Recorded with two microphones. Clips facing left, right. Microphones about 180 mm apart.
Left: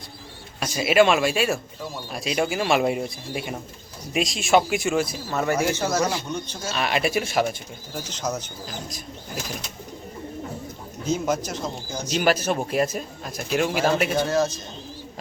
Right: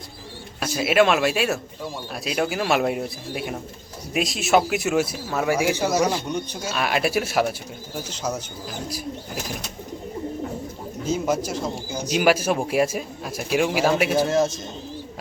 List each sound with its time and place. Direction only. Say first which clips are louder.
0.6 s speech: even; centre (ahead or behind)
11.1 s speech: right 1 dB; 5° right (ahead or behind)
14.3 s a man's voice: right 2 dB; 20° right (ahead or behind)